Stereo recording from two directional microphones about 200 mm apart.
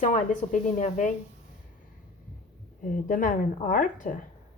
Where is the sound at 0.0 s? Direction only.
40° left (ahead or behind).